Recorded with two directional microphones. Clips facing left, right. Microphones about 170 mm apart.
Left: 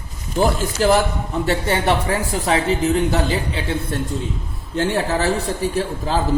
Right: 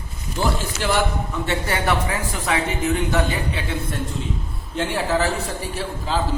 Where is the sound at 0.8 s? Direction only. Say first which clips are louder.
Left 8 dB; 40° left (ahead or behind).